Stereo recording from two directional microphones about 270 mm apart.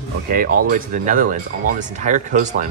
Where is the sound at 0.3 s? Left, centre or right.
Right.